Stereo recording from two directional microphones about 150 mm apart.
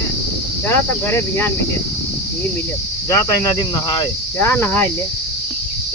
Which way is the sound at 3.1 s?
20° left (ahead or behind).